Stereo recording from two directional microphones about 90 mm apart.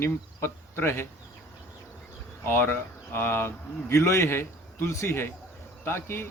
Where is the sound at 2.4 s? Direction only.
25° left (ahead or behind).